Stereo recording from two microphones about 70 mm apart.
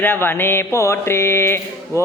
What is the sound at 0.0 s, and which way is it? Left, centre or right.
Speech, left.